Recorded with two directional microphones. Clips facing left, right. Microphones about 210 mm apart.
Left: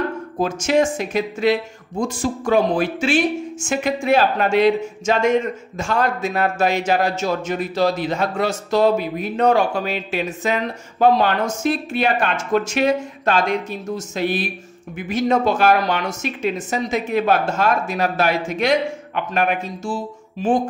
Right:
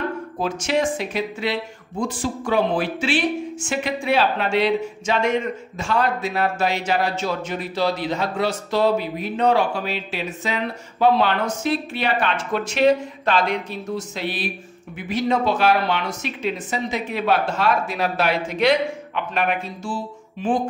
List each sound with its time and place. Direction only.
0.4 s speech: 45° left (ahead or behind)